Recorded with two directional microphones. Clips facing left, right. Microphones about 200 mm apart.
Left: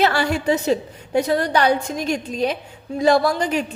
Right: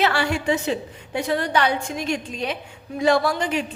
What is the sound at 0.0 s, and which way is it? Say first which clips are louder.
A woman's voice: left 3 dB; 40° left (ahead or behind).